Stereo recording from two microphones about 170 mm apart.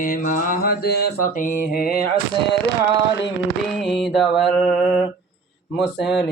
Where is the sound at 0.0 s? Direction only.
55° left (ahead or behind).